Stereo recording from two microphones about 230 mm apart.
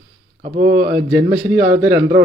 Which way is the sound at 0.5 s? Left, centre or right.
Right.